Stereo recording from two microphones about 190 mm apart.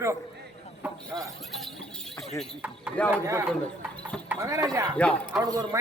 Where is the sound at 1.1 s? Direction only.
Centre (ahead or behind).